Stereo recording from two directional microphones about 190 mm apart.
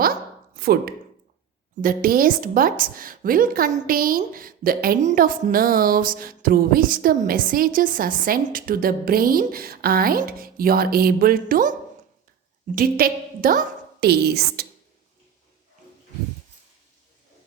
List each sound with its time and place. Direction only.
0.5 s a woman's voice: 55° right (ahead or behind)
12.7 s a woman's voice: 50° right (ahead or behind)